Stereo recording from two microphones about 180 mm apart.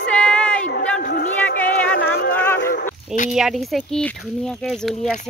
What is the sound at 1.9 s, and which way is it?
Speech, 60° left (ahead or behind).